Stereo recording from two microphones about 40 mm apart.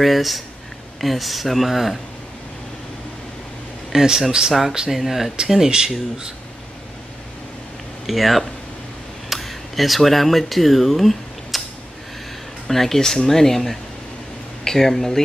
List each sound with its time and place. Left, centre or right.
0.0 s speech: centre
3.9 s speech: centre
4.9 s speech: centre
5.5 s speech: centre
8.1 s speech: centre
12.6 s speech: centre